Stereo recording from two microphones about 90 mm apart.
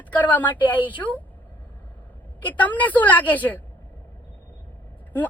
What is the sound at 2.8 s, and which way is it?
Speech, 20° left (ahead or behind).